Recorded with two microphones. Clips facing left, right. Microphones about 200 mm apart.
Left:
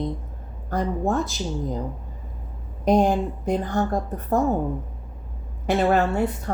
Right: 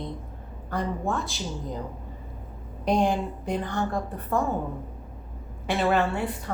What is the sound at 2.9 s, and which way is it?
Speech, 45° left (ahead or behind).